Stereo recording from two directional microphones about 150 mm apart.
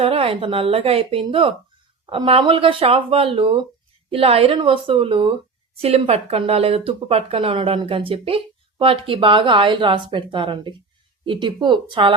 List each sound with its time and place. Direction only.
0.0 s speech: 40° right (ahead or behind)